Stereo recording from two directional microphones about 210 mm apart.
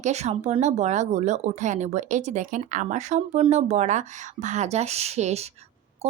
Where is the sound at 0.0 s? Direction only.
30° right (ahead or behind).